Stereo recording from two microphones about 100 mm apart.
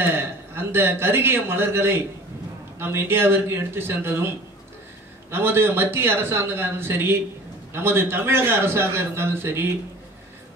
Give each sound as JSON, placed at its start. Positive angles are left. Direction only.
{"t": 0.0, "sound": "a man's voice", "side_deg": -25}
{"t": 5.3, "sound": "a man's voice", "side_deg": -25}